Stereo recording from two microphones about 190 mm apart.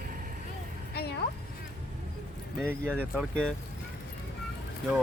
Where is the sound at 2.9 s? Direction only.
5° left (ahead or behind).